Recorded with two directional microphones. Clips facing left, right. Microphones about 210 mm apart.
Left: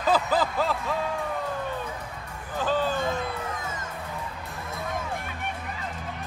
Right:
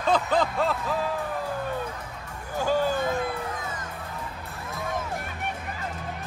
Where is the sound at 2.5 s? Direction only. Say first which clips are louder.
Right 2 dB; 10° right (ahead or behind).